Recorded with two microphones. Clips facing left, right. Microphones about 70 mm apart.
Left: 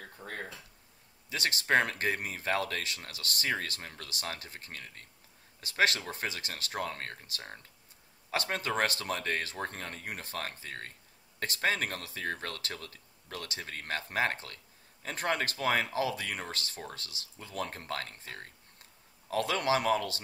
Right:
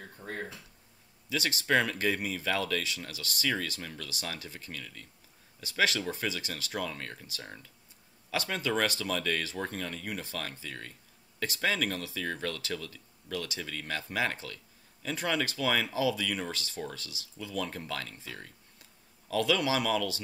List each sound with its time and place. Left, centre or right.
1.3 s speech: left